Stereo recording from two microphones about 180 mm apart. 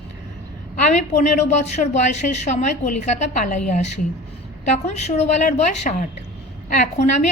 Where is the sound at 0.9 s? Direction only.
40° left (ahead or behind).